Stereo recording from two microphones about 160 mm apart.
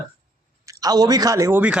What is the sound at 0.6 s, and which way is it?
Speech, 25° right (ahead or behind).